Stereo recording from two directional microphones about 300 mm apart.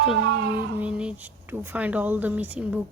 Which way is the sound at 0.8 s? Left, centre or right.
Centre.